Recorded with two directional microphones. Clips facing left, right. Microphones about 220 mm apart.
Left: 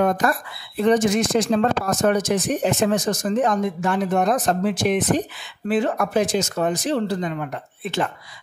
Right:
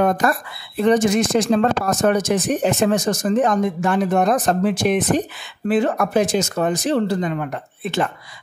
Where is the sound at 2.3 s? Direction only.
60° right (ahead or behind).